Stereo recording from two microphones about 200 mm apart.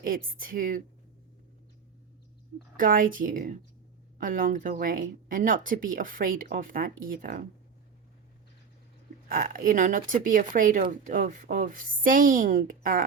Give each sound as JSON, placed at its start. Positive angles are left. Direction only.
{"t": 0.3, "sound": "speech", "side_deg": -45}
{"t": 2.7, "sound": "speech", "side_deg": -45}
{"t": 9.3, "sound": "speech", "side_deg": -45}